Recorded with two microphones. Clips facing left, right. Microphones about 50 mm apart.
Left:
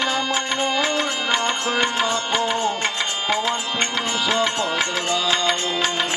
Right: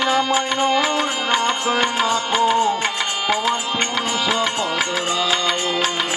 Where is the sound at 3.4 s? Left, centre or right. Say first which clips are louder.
Right 2 dB; centre.